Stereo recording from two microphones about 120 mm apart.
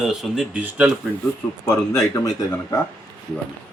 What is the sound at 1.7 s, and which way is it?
Speech, 25° left (ahead or behind).